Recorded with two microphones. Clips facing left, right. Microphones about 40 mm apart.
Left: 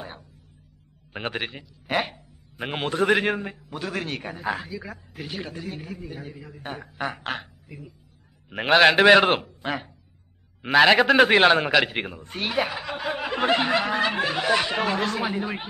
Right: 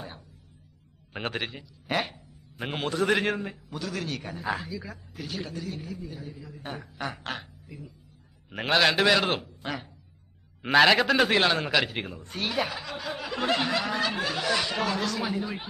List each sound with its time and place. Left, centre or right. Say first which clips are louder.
1.1 s a man's voice: left 2 dB; centre; by 3.2 s left
3.2 s a man's voice: left 3 dB; centre
4.5 s a man's voice: left 2 dB; centre
8.5 s a man's voice: left 6 dB; centre
8.7 s a man's voice: left 7 dB; left
9.6 s speech: left 5 dB; centre
10.6 s a man's voice: left 3 dB; centre
11.1 s a man's voice: left 6 dB; left